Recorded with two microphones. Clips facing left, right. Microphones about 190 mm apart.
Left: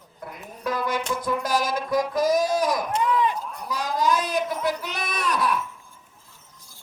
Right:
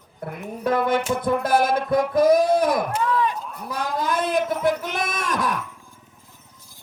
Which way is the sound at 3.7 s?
55° right (ahead or behind).